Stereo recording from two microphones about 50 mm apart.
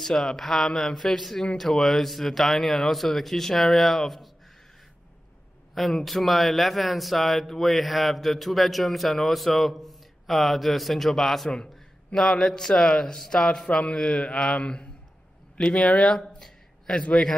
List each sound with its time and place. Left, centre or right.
0.0 s a man's voice: centre
5.8 s a man's voice: centre